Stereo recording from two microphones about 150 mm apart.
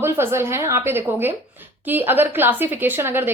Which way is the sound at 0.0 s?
15° right (ahead or behind).